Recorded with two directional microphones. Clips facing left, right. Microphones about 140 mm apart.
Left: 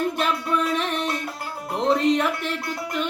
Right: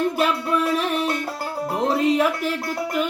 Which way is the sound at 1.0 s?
30° right (ahead or behind).